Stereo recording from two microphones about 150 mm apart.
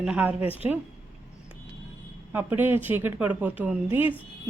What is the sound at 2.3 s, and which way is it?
Speech, 15° right (ahead or behind).